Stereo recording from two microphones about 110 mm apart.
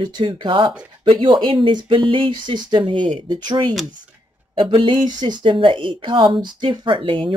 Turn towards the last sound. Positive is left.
turn(degrees=-50)  # may be behind; listen again after turning